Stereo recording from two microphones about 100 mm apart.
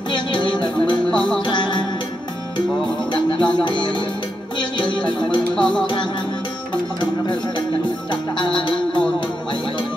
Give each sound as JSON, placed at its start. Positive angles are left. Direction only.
{"t": 0.1, "sound": "music", "side_deg": 55}
{"t": 3.1, "sound": "music", "side_deg": 55}
{"t": 7.0, "sound": "speech", "side_deg": 55}
{"t": 8.1, "sound": "music", "side_deg": 55}